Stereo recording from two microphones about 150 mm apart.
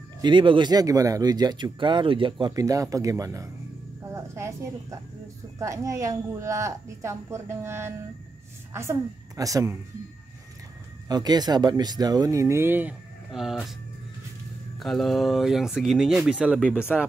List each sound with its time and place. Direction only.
0.2 s speech: 30° right (ahead or behind)
4.1 s cricket: 20° right (ahead or behind)
5.6 s speech: 20° right (ahead or behind)
9.4 s speech: 20° right (ahead or behind)
11.1 s speech: 25° right (ahead or behind)
13.3 s speech: centre (ahead or behind)
14.8 s speech: centre (ahead or behind)